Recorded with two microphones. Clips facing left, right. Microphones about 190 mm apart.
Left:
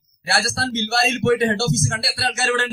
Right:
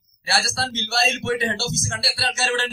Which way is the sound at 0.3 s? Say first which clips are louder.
Left 2 dB; 55° left (ahead or behind).